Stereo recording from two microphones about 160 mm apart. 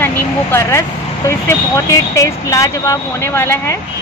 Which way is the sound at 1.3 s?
20° left (ahead or behind).